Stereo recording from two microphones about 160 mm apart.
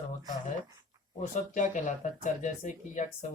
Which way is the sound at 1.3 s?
55° left (ahead or behind).